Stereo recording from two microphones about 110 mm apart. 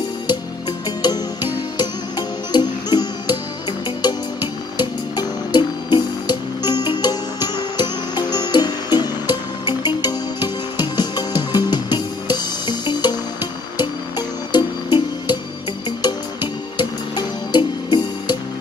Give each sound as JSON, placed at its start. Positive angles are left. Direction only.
{"t": 0.3, "sound": "music", "side_deg": 40}
{"t": 16.7, "sound": "music", "side_deg": 40}